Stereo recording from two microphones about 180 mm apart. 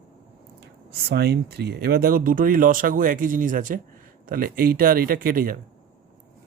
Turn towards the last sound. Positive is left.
turn(degrees=-50)  # may be behind; listen again after turning